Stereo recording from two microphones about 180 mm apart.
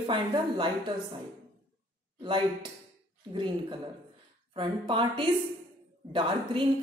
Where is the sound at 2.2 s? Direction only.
25° right (ahead or behind).